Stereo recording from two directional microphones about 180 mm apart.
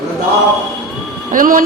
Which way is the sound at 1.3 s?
50° right (ahead or behind).